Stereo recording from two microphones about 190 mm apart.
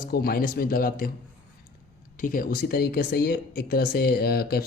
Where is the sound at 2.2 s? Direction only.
45° left (ahead or behind).